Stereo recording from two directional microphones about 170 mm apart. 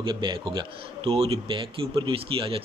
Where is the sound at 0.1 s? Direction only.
30° right (ahead or behind).